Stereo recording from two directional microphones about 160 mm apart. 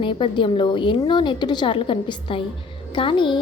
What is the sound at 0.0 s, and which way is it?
A woman's voice, 30° left (ahead or behind).